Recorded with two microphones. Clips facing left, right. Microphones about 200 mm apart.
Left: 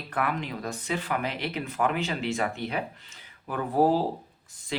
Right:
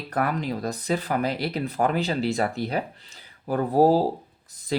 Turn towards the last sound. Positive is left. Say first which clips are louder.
# right 6 dB
turn(degrees=-40)  # may be behind; listen again after turning